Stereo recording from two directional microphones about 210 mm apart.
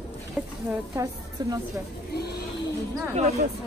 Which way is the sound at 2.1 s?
50° left (ahead or behind).